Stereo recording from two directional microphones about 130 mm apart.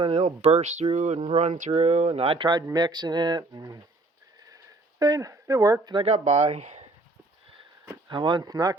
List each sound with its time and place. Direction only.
0.0 s speech: 55° right (ahead or behind); by 3.8 s 30° right (ahead or behind)
4.4 s a sound: 30° right (ahead or behind)
6.1 s speech: 55° right (ahead or behind)
8.1 s speech: 35° right (ahead or behind)